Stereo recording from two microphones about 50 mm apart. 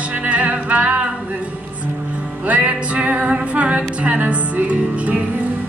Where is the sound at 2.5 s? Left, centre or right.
Right.